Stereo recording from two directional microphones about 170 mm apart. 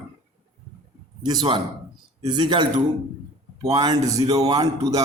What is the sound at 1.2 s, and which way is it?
Speech, 25° right (ahead or behind).